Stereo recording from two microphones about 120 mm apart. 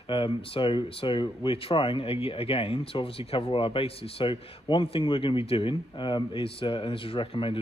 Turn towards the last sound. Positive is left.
turn(degrees=45)  # may be behind; listen again after turning